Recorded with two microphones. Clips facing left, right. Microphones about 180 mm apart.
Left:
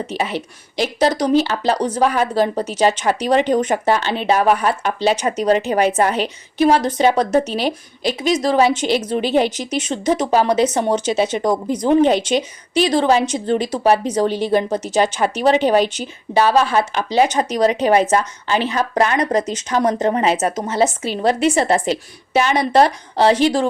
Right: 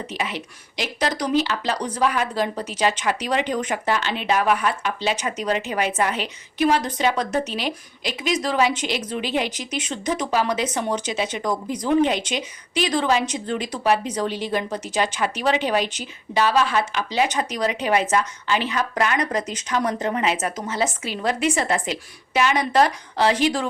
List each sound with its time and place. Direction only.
0.2 s speech: 35° left (ahead or behind)
20.8 s speech: 30° left (ahead or behind)